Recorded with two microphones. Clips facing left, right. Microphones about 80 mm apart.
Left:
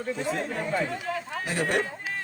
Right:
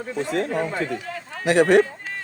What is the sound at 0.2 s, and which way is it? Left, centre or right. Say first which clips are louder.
Speech: right 10 dB; right.